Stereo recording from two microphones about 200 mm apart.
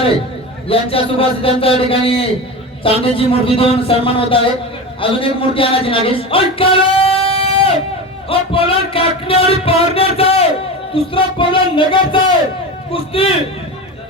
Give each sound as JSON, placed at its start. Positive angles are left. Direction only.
{"t": 0.7, "sound": "a man's voice", "side_deg": 30}